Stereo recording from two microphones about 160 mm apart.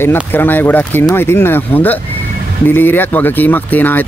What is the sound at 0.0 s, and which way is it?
Speech, 15° left (ahead or behind).